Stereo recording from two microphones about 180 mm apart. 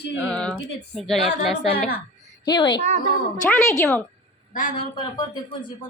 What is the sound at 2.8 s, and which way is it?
Speech, 40° right (ahead or behind).